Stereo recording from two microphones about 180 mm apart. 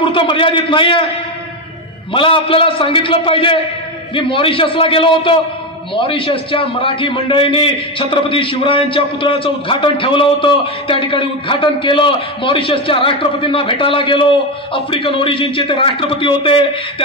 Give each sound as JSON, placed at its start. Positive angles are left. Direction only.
{"t": 0.1, "sound": "a man's voice", "side_deg": 30}
{"t": 2.1, "sound": "a man's voice", "side_deg": 30}